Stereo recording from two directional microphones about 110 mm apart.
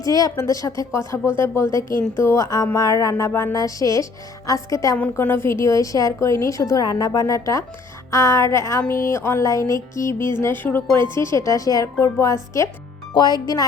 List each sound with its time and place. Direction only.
0.0 s a woman's voice: 35° left (ahead or behind)
13.1 s speech: 40° left (ahead or behind)